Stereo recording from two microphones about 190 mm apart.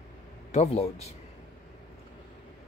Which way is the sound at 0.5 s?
35° left (ahead or behind).